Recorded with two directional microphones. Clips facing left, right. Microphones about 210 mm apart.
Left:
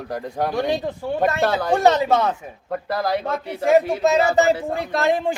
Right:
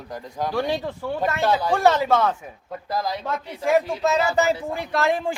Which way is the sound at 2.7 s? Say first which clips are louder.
Left 5 dB; 65° left (ahead or behind).